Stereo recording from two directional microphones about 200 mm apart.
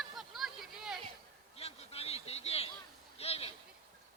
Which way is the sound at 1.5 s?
30° left (ahead or behind).